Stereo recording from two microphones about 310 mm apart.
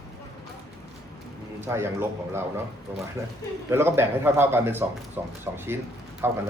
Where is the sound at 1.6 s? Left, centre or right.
Centre.